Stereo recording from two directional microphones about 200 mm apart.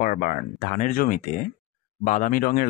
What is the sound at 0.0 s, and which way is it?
Speech, 45° left (ahead or behind).